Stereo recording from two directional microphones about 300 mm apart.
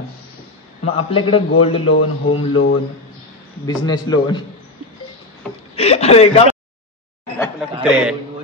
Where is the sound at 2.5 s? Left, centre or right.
Left.